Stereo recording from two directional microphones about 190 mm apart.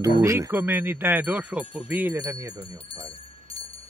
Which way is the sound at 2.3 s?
20° right (ahead or behind).